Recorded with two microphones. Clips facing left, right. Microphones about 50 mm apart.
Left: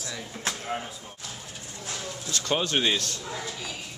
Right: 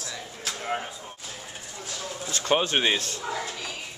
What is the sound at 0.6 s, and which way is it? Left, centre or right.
Speech, centre.